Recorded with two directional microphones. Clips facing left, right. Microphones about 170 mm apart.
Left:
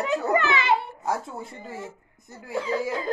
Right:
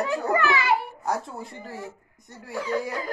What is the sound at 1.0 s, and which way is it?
Speech, centre (ahead or behind).